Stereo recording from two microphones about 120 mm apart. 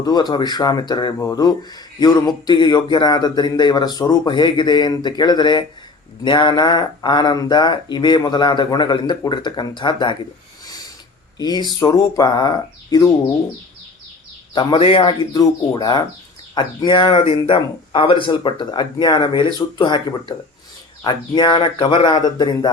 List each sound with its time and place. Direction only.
0.0 s speech: 35° left (ahead or behind)
11.3 s speech: 35° left (ahead or behind)
14.5 s speech: 40° left (ahead or behind)
15.2 s speech: 35° left (ahead or behind)
22.4 s speech: 35° left (ahead or behind)